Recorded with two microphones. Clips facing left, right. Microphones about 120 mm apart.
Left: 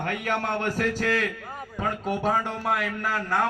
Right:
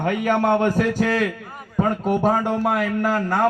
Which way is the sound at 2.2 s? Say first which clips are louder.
Right 5 dB; 55° right (ahead or behind).